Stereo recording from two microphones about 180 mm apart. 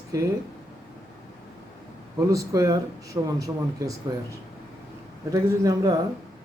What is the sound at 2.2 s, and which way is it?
Speech, 20° right (ahead or behind).